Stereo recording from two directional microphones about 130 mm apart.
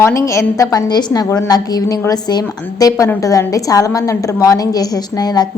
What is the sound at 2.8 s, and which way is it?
A woman's voice, 30° left (ahead or behind).